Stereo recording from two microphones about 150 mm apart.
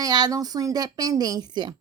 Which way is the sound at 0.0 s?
25° right (ahead or behind).